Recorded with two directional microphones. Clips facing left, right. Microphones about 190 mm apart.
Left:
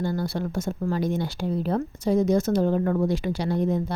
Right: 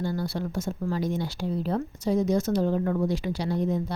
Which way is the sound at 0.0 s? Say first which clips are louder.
Left 2 dB; 55° left (ahead or behind).